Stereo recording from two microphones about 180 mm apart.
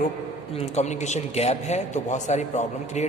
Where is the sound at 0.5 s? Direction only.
35° left (ahead or behind).